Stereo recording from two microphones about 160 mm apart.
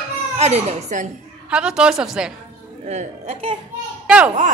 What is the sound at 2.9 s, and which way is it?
Speech, 45° right (ahead or behind).